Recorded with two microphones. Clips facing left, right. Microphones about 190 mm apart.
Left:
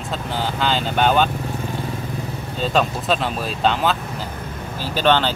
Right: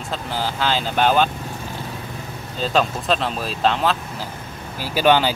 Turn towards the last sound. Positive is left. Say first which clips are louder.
# right 1 dB
turn(degrees=-10)  # may be behind; listen again after turning